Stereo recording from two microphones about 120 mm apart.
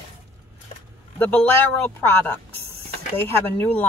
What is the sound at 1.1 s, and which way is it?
Speech, 15° left (ahead or behind).